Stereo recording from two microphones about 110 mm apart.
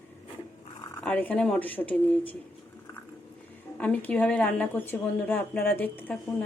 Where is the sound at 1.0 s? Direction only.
15° left (ahead or behind).